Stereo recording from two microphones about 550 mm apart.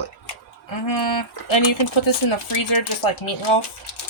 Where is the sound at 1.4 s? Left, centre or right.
Left.